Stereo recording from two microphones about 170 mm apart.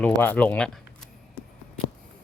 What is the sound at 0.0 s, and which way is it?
Speech, 10° left (ahead or behind).